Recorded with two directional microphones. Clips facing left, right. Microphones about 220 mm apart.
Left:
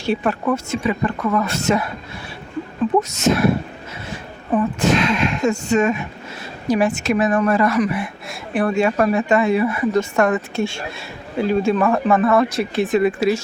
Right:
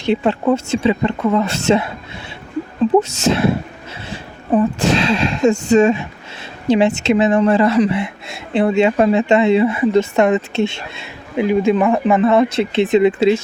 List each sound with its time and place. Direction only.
0.0 s speech: 20° right (ahead or behind)
3.0 s speech: 30° right (ahead or behind)